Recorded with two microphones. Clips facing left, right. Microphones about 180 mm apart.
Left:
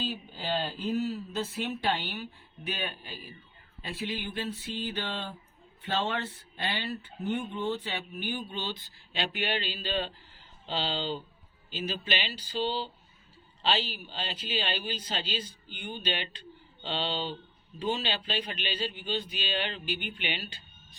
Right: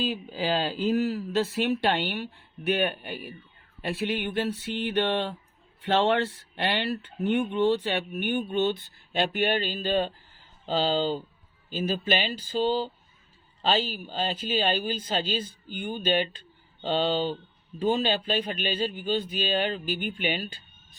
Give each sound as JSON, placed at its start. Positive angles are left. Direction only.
{"t": 0.0, "sound": "speech", "side_deg": -90}
{"t": 9.1, "sound": "speech", "side_deg": -50}